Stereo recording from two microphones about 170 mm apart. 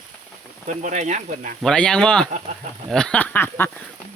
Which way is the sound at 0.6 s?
45° right (ahead or behind).